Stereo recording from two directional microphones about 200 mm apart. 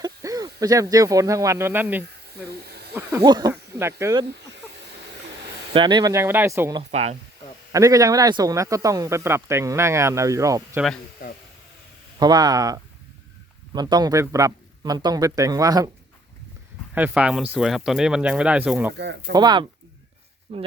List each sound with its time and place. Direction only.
0.0 s speech: 20° right (ahead or behind)
5.7 s speech: 20° right (ahead or behind)
6.9 s speech: 30° right (ahead or behind)
7.7 s speech: 15° right (ahead or behind)
11.2 s a sound: 45° left (ahead or behind)
12.2 s a man's voice: 20° right (ahead or behind)
16.9 s speech: 5° right (ahead or behind)
19.3 s a man's voice: 20° right (ahead or behind)